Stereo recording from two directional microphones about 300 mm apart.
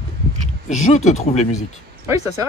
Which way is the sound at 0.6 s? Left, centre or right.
Left.